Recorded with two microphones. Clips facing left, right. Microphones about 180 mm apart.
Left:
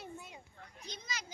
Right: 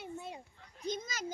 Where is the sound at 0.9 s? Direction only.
45° right (ahead or behind).